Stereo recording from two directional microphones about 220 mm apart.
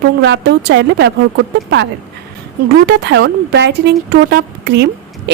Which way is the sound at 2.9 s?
50° right (ahead or behind).